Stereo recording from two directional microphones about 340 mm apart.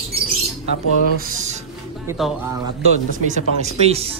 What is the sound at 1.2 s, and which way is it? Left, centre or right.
Speech, right.